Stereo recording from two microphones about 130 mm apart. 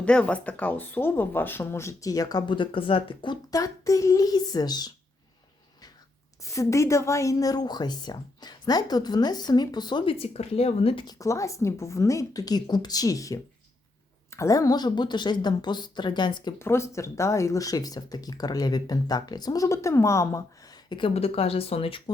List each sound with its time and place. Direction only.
0.0 s speech: 10° left (ahead or behind); by 4.9 s 30° left (ahead or behind)
6.4 s a woman's voice: 25° left (ahead or behind)
10.2 s speech: 50° left (ahead or behind)
11.0 s a woman's voice: 30° left (ahead or behind)
16.6 s speech: 20° left (ahead or behind)
21.1 s speech: 50° left (ahead or behind)